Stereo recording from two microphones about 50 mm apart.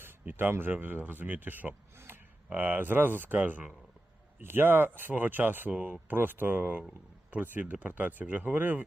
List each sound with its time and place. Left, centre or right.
0.3 s speech: right
4.4 s speech: right